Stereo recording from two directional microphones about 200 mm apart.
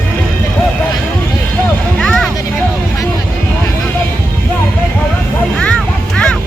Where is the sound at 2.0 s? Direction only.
Centre (ahead or behind).